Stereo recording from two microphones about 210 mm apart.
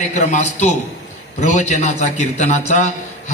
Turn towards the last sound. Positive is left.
turn(degrees=35)  # may be behind; listen again after turning